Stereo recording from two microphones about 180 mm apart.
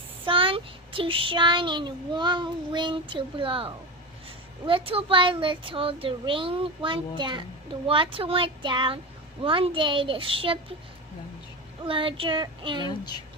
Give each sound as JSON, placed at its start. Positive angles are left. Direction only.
{"t": 0.3, "sound": "a child's voice", "side_deg": -30}
{"t": 11.9, "sound": "a child's voice", "side_deg": -30}
{"t": 12.9, "sound": "a woman's voice", "side_deg": 25}